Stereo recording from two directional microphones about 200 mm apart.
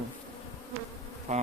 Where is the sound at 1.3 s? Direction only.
35° right (ahead or behind).